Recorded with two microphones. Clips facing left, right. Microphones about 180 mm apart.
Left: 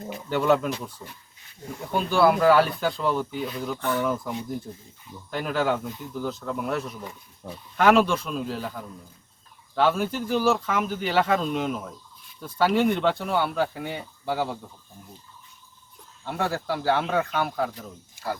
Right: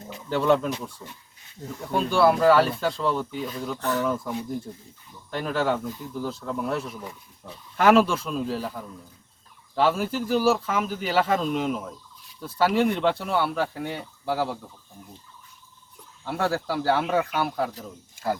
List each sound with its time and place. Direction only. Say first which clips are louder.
0.3 s speech: even; centre (ahead or behind)
5.3 s speech: even; centre (ahead or behind)
16.2 s speech: right 2 dB; 5° right (ahead or behind)